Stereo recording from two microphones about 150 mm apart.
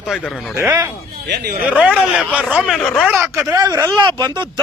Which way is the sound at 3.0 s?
15° right (ahead or behind).